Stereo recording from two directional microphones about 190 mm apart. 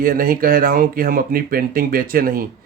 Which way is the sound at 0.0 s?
50° right (ahead or behind).